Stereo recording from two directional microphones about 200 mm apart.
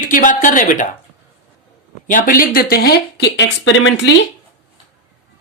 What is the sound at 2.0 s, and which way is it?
Speech, 40° left (ahead or behind).